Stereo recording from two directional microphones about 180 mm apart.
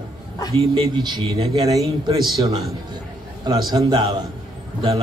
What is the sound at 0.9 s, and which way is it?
Speech, 25° right (ahead or behind).